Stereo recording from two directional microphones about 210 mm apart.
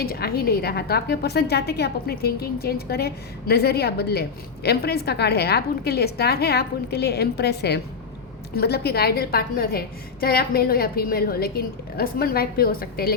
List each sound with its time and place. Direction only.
0.0 s a woman's voice: 45° left (ahead or behind)